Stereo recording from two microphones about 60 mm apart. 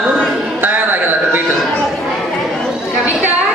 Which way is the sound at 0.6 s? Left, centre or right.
Right.